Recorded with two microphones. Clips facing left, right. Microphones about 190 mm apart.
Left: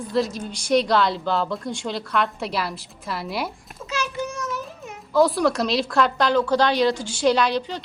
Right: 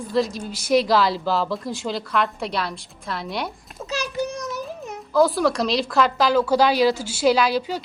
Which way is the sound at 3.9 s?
35° right (ahead or behind).